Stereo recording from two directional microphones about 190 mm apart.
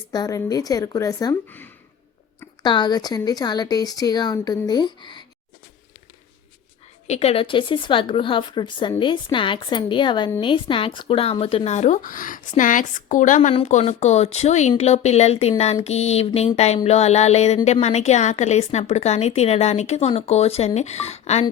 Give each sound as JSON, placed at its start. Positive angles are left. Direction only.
{"t": 0.1, "sound": "a woman's voice", "side_deg": 20}
{"t": 2.6, "sound": "a woman's voice", "side_deg": 25}
{"t": 7.1, "sound": "a woman's voice", "side_deg": 35}